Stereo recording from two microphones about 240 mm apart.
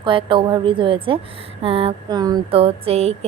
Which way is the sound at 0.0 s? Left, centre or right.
Right.